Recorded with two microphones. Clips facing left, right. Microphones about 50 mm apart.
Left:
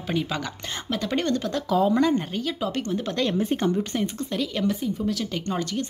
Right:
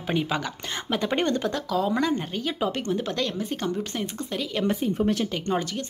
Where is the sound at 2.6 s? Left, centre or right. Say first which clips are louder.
Right 3 dB; centre.